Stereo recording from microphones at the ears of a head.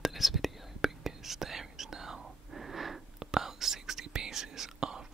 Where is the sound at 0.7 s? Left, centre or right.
Right.